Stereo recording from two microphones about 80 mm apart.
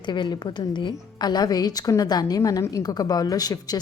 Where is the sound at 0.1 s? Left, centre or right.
Left.